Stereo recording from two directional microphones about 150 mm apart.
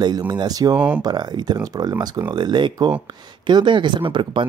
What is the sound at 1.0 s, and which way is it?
Speech, 30° right (ahead or behind).